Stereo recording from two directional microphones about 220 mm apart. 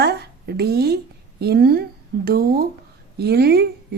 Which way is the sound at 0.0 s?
50° right (ahead or behind).